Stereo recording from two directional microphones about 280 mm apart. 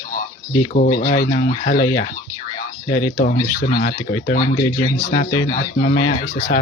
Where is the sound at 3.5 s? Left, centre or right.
Left.